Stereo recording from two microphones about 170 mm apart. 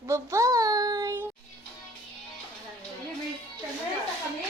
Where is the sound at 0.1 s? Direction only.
20° right (ahead or behind).